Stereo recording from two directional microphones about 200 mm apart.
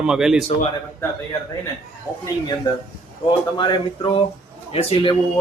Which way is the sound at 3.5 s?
25° left (ahead or behind).